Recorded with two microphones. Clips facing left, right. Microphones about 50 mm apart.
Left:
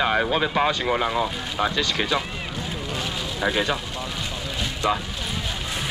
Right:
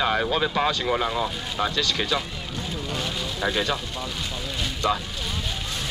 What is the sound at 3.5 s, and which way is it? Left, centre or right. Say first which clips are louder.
Speech: left 2 dB; centre.